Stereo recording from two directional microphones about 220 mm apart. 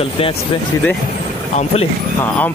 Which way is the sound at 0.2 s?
25° left (ahead or behind).